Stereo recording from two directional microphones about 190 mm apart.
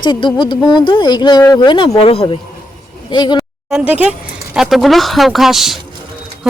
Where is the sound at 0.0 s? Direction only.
25° left (ahead or behind).